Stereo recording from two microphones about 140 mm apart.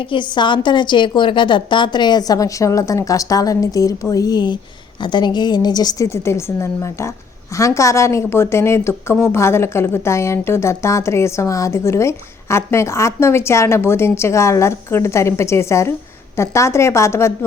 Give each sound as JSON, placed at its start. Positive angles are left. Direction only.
{"t": 0.1, "sound": "a woman's voice", "side_deg": 35}